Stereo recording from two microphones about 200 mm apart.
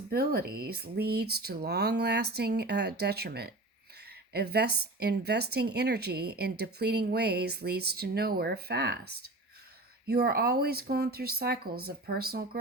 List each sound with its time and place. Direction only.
0.1 s a woman's voice: 50° right (ahead or behind)